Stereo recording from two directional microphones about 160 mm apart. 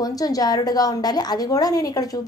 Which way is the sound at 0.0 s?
25° left (ahead or behind).